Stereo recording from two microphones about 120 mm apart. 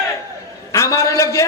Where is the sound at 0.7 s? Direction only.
25° left (ahead or behind).